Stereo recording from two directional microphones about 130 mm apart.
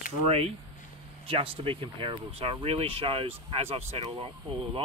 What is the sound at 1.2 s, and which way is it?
Speech, 45° right (ahead or behind).